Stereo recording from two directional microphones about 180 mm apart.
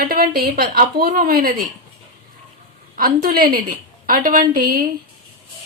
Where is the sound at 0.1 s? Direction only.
55° right (ahead or behind).